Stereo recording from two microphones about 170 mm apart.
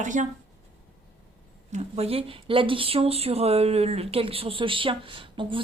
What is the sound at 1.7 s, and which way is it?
Speech, 35° right (ahead or behind).